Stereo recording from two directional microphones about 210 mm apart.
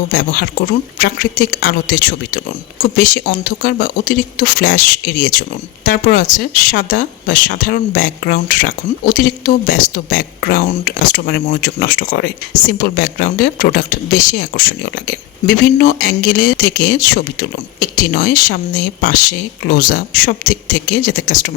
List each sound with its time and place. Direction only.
0.1 s speech: 45° left (ahead or behind)